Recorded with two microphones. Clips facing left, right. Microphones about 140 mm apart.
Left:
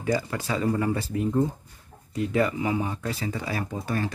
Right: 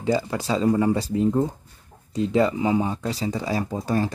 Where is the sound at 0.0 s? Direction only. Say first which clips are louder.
Right 3 dB; 25° right (ahead or behind).